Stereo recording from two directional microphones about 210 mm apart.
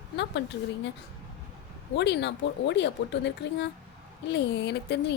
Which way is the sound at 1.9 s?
55° left (ahead or behind).